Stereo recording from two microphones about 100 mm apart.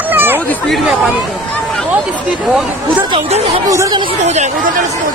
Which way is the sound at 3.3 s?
90° right.